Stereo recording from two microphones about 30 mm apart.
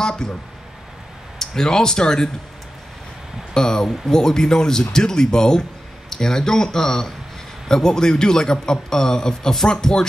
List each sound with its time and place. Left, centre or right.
0.0 s speech: left
1.4 s speech: centre
3.5 s speech: left